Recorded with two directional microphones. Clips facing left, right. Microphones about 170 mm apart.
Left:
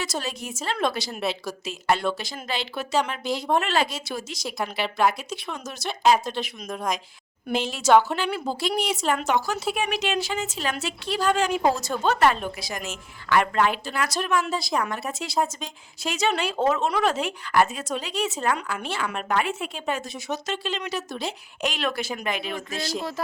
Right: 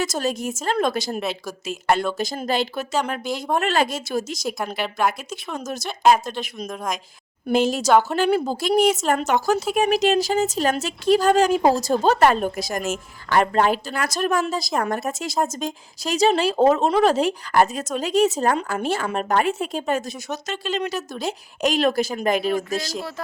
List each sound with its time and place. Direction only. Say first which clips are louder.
0.0 s a woman's voice: right 7 dB; 45° right (ahead or behind)
5.5 s a woman's voice: right 4 dB; 45° right (ahead or behind)
6.7 s speech: left 1 dB; centre (ahead or behind)
7.5 s a woman's voice: right 2 dB; 45° right (ahead or behind)